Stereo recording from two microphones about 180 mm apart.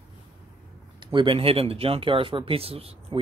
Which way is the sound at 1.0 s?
30° right (ahead or behind).